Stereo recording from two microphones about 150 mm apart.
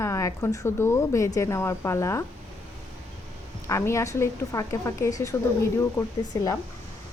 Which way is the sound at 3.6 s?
20° left (ahead or behind).